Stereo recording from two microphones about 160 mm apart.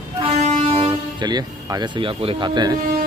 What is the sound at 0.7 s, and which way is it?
Speech, 25° right (ahead or behind).